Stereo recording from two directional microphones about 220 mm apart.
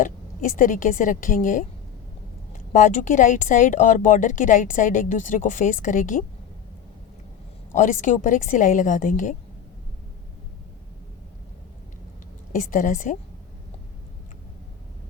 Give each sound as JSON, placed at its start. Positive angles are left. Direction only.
{"t": 0.0, "sound": "speech", "side_deg": 40}
{"t": 2.7, "sound": "speech", "side_deg": 35}
{"t": 7.7, "sound": "speech", "side_deg": 35}
{"t": 12.5, "sound": "speech", "side_deg": 35}